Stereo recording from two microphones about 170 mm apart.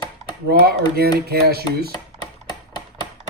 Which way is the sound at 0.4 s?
65° right (ahead or behind).